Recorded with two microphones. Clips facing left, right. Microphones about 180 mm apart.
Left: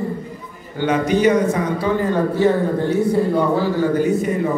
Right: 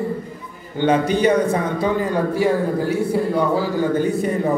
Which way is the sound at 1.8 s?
10° right (ahead or behind).